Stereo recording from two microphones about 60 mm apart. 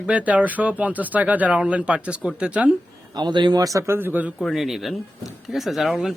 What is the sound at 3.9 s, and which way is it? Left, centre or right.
Speech, right.